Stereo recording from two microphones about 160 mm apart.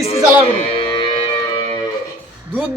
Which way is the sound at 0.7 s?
35° left (ahead or behind).